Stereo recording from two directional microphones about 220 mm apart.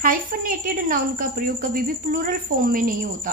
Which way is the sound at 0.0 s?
40° right (ahead or behind).